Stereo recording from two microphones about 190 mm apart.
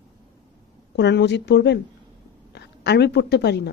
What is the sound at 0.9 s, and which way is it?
A woman's voice, 65° left (ahead or behind).